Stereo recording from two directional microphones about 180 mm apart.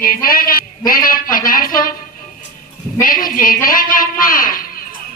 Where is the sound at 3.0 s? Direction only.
50° left (ahead or behind).